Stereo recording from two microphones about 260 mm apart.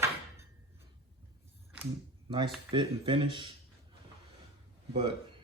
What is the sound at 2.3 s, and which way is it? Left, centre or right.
Speech, centre.